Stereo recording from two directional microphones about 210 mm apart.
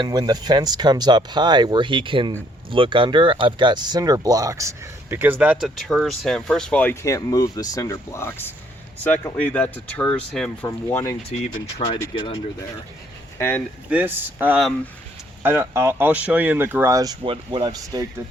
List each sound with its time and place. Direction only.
0.0 s speech: 20° right (ahead or behind); by 12.6 s 25° left (ahead or behind)
13.9 s speech: 10° right (ahead or behind)